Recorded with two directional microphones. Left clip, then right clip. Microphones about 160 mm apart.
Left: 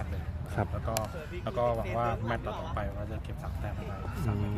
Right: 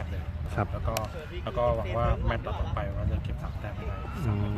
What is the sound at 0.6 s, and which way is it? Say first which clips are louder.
Speech: right 2 dB; 15° right (ahead or behind).